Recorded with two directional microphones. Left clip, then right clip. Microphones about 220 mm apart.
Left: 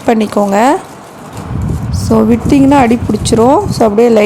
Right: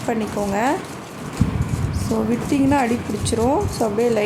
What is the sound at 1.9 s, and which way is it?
A woman's voice, 35° left (ahead or behind).